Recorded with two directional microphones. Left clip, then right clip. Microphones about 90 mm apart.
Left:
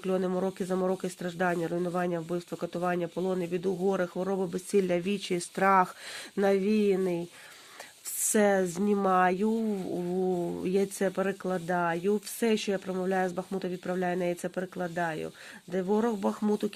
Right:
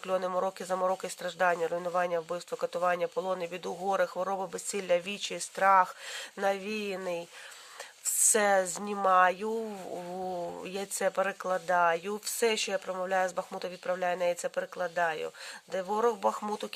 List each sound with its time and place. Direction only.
0.0 s speech: 40° right (ahead or behind)
4.8 s speech: 20° right (ahead or behind)
5.4 s speech: centre (ahead or behind); by 9.6 s 25° right (ahead or behind)
10.0 s speech: 45° right (ahead or behind); by 11.0 s 30° right (ahead or behind)
11.0 s speech: 40° right (ahead or behind)